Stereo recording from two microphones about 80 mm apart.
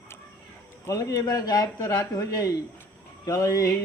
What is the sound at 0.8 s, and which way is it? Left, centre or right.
A man's voice, left.